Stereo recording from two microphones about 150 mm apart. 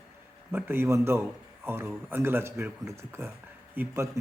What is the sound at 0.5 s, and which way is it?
A man's voice, 15° right (ahead or behind).